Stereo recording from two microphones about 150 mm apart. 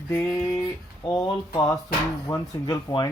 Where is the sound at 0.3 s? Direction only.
20° left (ahead or behind).